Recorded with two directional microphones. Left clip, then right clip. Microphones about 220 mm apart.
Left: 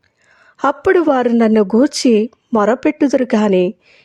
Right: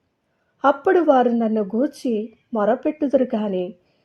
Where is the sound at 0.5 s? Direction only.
35° left (ahead or behind).